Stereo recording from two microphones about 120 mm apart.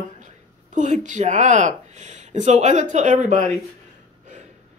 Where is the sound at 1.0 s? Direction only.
90° right.